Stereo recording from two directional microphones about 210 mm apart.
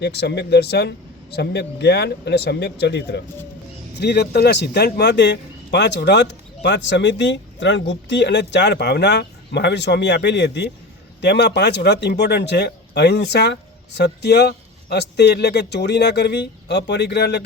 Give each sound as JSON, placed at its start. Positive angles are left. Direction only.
{"t": 0.0, "sound": "a man's voice", "side_deg": 50}